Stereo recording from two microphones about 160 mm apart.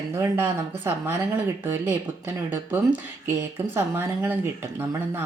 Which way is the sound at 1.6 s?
15° right (ahead or behind).